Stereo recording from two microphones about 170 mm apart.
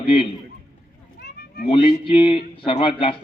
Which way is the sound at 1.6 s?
30° left (ahead or behind).